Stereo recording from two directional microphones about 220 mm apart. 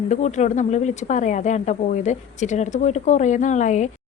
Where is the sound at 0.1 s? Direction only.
30° left (ahead or behind).